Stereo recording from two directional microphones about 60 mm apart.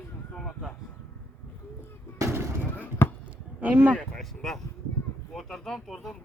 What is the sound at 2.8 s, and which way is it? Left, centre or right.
Basketball bounce, left.